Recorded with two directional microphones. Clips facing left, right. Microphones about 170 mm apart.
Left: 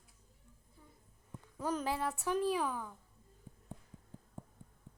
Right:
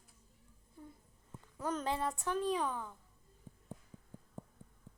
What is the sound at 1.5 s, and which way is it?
A woman's voice, 10° left (ahead or behind).